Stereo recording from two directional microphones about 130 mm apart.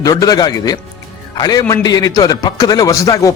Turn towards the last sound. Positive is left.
turn(degrees=25)  # may be behind; listen again after turning